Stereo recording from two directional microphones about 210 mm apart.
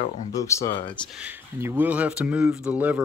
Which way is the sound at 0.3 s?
15° left (ahead or behind).